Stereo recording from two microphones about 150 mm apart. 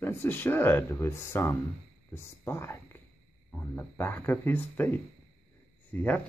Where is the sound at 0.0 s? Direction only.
15° left (ahead or behind).